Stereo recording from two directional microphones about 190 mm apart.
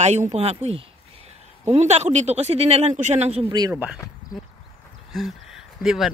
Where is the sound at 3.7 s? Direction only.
5° right (ahead or behind).